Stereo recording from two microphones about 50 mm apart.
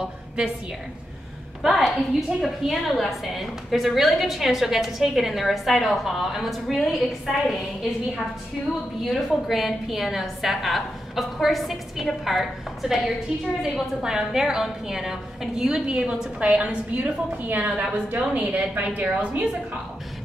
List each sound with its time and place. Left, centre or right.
1.6 s a woman's voice: centre
9.0 s a woman's voice: centre; by 19.8 s right